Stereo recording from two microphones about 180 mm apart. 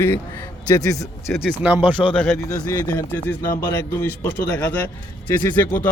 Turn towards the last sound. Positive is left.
turn(degrees=10)  # may be behind; listen again after turning